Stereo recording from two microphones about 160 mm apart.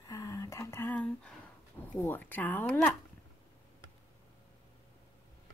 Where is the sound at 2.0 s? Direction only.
15° left (ahead or behind).